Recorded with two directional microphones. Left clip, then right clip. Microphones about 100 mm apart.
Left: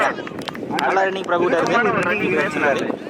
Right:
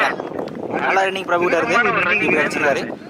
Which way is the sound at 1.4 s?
45° right (ahead or behind).